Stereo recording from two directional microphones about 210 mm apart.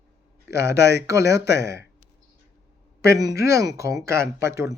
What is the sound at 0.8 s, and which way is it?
Speech, 50° left (ahead or behind).